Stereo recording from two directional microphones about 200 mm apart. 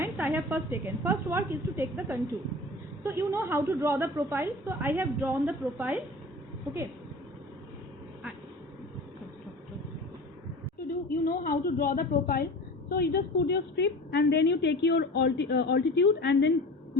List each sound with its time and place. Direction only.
0.0 s a woman's voice: 10° right (ahead or behind)
11.1 s a woman's voice: 45° left (ahead or behind)